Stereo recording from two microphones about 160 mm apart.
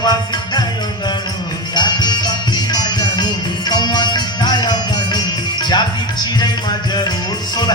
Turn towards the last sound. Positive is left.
turn(degrees=25)  # may be behind; listen again after turning